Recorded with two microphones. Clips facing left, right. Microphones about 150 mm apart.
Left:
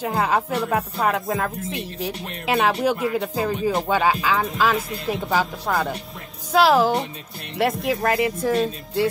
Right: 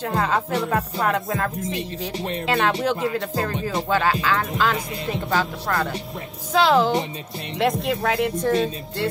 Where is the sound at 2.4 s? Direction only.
5° left (ahead or behind).